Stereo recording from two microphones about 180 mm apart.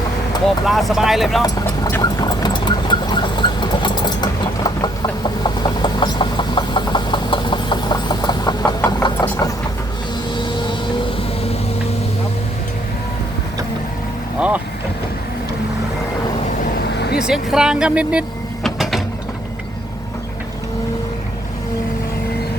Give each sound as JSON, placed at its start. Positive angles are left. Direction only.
{"t": 0.6, "sound": "speech", "side_deg": 0}
{"t": 1.4, "sound": "a sound", "side_deg": 20}
{"t": 14.3, "sound": "vehicle", "side_deg": -5}
{"t": 17.2, "sound": "vehicle", "side_deg": -5}